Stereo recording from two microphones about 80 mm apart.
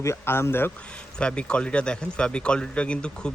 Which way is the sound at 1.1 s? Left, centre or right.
Centre.